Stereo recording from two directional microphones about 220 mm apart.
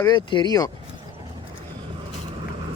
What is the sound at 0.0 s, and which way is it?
Speech, 20° left (ahead or behind).